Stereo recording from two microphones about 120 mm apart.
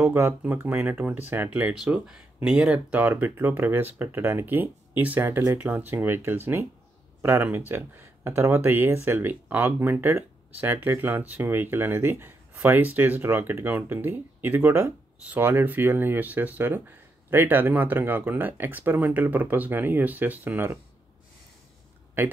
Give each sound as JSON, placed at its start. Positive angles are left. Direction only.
{"t": 0.0, "sound": "speech", "side_deg": -20}